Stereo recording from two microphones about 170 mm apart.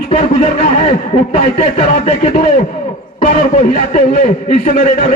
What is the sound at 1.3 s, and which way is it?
Speech, 40° left (ahead or behind).